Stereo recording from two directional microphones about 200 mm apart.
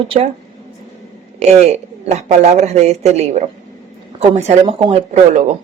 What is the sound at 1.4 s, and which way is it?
Speech, 35° right (ahead or behind).